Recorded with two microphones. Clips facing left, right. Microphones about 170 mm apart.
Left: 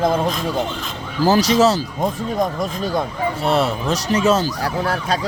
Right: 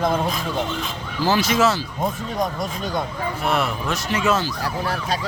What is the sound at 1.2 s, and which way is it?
Speech, 40° left (ahead or behind).